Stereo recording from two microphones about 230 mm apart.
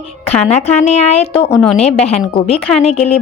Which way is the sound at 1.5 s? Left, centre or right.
Centre.